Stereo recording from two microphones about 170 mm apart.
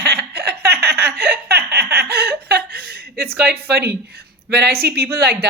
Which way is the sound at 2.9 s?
70° right (ahead or behind).